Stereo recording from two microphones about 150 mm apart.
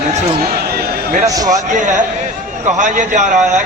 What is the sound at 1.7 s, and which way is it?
A man's voice, 55° right (ahead or behind).